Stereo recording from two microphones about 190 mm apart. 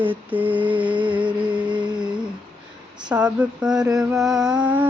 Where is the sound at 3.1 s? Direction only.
5° right (ahead or behind).